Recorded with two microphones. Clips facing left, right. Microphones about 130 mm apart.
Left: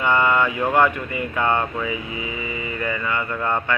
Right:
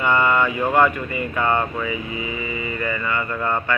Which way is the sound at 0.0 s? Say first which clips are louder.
Even; 15° left (ahead or behind).